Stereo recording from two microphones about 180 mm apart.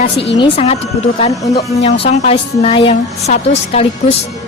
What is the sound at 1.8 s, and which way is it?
A woman's voice, 35° left (ahead or behind).